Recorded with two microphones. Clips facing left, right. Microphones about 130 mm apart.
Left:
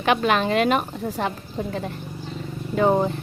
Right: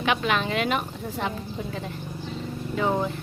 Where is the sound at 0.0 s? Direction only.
45° left (ahead or behind).